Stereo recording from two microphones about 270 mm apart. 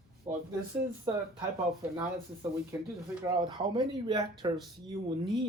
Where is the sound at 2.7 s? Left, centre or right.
Centre.